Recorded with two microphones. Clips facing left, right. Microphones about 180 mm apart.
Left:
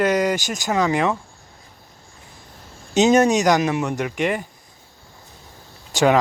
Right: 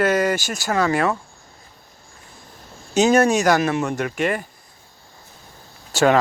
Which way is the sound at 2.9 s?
20° left (ahead or behind).